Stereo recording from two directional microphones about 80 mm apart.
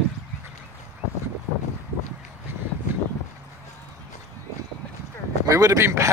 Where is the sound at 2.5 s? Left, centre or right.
Right.